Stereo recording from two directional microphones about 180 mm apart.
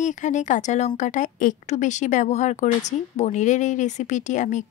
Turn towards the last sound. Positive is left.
turn(degrees=45)  # may be behind; listen again after turning